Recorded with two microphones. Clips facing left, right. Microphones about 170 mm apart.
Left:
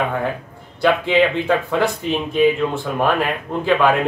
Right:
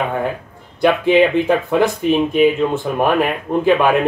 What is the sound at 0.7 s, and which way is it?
Speech, 15° right (ahead or behind).